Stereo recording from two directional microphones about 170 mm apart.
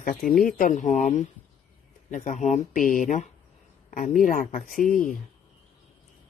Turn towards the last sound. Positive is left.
turn(degrees=55)  # may be behind; listen again after turning